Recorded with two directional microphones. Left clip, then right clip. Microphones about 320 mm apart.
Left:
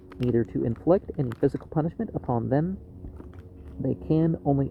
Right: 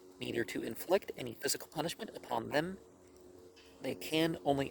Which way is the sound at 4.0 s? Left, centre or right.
Right.